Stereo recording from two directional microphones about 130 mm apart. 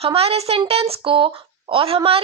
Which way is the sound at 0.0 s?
50° right (ahead or behind).